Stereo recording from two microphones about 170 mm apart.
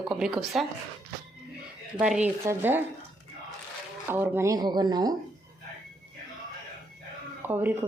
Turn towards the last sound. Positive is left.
turn(degrees=-10)  # may be behind; listen again after turning